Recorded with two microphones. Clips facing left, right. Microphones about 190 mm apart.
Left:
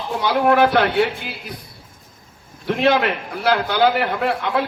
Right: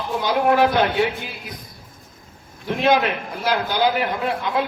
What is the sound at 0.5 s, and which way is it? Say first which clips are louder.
Speech: left 2 dB; 65° left (ahead or behind).